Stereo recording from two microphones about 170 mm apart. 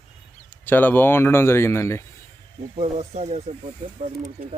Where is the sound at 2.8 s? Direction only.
40° right (ahead or behind).